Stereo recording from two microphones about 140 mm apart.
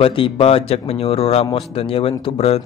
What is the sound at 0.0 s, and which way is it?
Speech, 40° left (ahead or behind).